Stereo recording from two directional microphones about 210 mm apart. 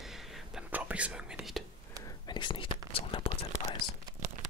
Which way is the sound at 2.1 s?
20° left (ahead or behind).